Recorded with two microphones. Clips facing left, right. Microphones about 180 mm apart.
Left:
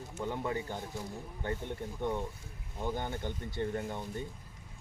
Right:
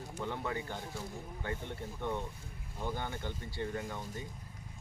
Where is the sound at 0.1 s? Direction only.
15° left (ahead or behind).